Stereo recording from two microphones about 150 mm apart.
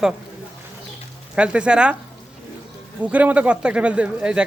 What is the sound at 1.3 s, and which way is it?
Speech, 5° right (ahead or behind).